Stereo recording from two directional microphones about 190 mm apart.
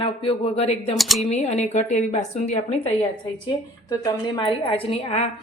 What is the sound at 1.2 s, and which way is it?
A woman's voice, 35° left (ahead or behind).